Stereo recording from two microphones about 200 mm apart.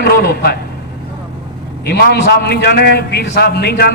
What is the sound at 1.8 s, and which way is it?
A man's voice, 55° left (ahead or behind).